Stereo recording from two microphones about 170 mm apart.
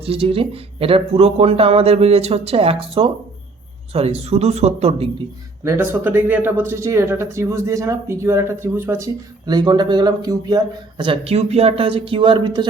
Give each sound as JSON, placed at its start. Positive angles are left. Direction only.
{"t": 0.0, "sound": "speech", "side_deg": -35}
{"t": 5.6, "sound": "speech", "side_deg": -15}
{"t": 9.5, "sound": "speech", "side_deg": -25}